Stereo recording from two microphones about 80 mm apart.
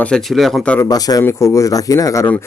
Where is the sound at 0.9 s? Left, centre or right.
Left.